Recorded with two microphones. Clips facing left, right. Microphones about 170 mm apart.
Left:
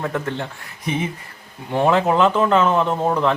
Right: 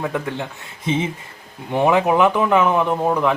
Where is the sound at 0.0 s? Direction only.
15° right (ahead or behind).